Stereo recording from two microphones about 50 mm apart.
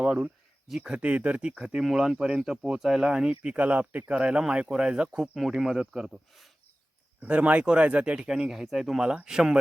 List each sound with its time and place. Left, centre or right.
0.0 s speech: centre
0.9 s speech: right
1.8 s speech: centre
2.1 s speech: centre
2.5 s speech: centre
3.4 s speech: right
4.1 s speech: right
5.0 s speech: centre
7.2 s speech: right
8.4 s speech: centre
9.2 s speech: centre